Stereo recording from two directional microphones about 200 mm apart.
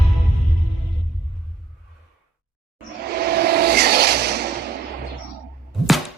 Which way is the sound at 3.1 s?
50° right (ahead or behind).